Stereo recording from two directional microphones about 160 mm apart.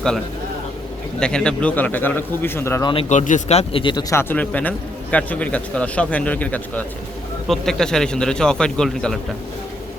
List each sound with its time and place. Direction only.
1.2 s a man's voice: 5° left (ahead or behind)
2.8 s speech: 35° left (ahead or behind)
3.1 s speech: 50° left (ahead or behind); by 4.0 s 35° left (ahead or behind)
4.1 s a man's voice: 15° left (ahead or behind)